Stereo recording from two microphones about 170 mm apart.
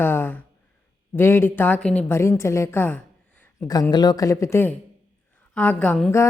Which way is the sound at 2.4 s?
15° left (ahead or behind).